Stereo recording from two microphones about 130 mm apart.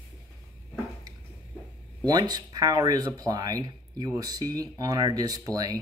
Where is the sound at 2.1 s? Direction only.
30° right (ahead or behind).